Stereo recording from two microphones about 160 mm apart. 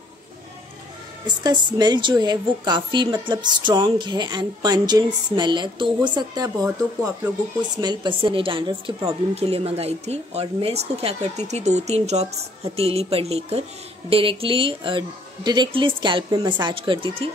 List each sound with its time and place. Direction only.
1.2 s a woman's voice: 30° right (ahead or behind)